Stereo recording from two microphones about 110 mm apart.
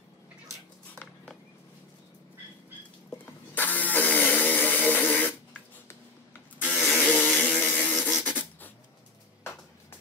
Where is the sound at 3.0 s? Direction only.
15° left (ahead or behind).